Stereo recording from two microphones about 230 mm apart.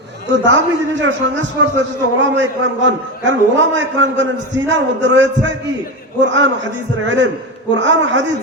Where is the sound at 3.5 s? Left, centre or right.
Right.